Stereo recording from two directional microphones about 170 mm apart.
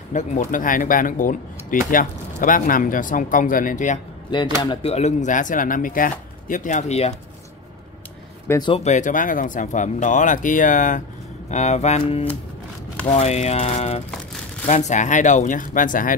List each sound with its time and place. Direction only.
0.1 s speech: 45° left (ahead or behind)
4.3 s speech: 30° left (ahead or behind)
8.5 s speech: 25° left (ahead or behind)
8.7 s speech: 45° left (ahead or behind)
13.0 s speech: 40° left (ahead or behind)